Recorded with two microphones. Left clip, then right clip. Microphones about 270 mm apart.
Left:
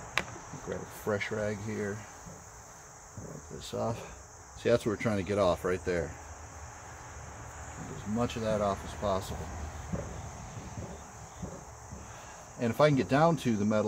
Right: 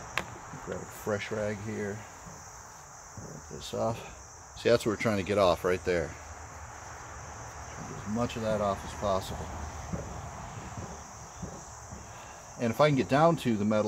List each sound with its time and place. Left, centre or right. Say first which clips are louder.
0.1 s insect: left 2 dB; centre
3.5 s speech: right 3 dB; centre
8.0 s speech: even; centre
12.5 s speech: right 1 dB; centre